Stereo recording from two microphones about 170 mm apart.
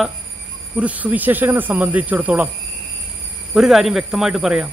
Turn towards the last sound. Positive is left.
turn(degrees=-5)  # may be behind; listen again after turning